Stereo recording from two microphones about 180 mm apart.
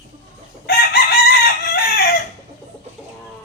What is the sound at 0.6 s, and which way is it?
Chicken, 60° left (ahead or behind).